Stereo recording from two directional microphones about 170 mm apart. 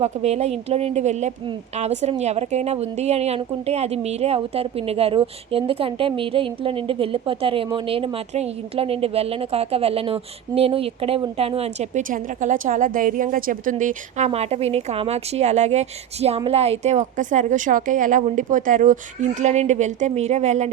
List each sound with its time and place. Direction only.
0.0 s a woman's voice: 40° right (ahead or behind)